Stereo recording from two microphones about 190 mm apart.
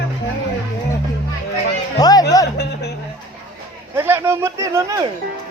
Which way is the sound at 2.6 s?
60° left (ahead or behind).